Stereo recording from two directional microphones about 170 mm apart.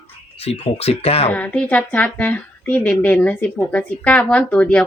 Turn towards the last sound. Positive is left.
turn(degrees=10)  # may be behind; listen again after turning